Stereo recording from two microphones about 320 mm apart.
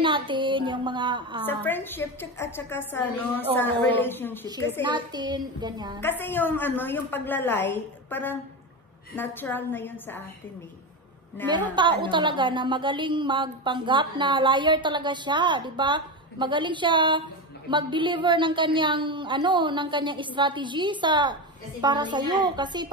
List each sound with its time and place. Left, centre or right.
0.0 s speech: centre
1.4 s a woman's voice: centre
4.8 s speech: centre
5.9 s a woman's voice: centre
12.0 s speech: centre